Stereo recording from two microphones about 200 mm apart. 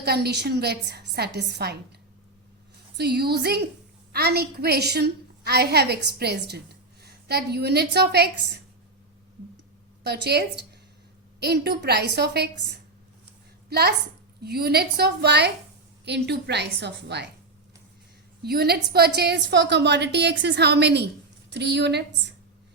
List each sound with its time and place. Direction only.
0.0 s a woman's voice: 55° right (ahead or behind)
3.0 s a woman's voice: 55° right (ahead or behind)
10.0 s a woman's voice: 55° right (ahead or behind)
18.4 s a woman's voice: 50° right (ahead or behind)